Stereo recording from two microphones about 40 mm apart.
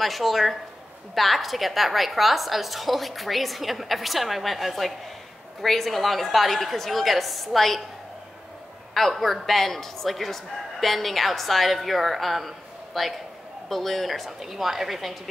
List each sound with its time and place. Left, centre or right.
0.0 s speech: centre
8.9 s speech: centre